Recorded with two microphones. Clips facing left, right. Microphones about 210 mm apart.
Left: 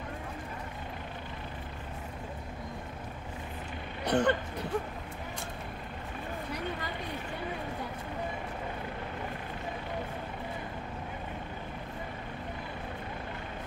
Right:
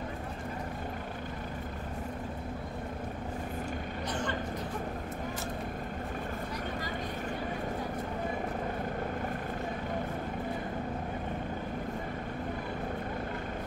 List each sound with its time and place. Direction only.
4.0 s speech: 65° left (ahead or behind)